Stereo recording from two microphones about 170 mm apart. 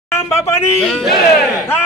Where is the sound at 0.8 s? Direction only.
Centre (ahead or behind).